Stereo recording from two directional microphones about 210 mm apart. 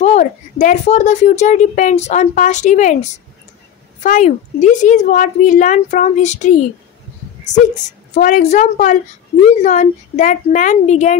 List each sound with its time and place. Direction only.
0.0 s speech: 35° left (ahead or behind)